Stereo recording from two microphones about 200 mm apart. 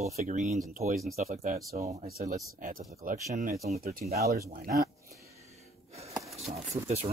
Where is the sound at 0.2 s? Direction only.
40° right (ahead or behind).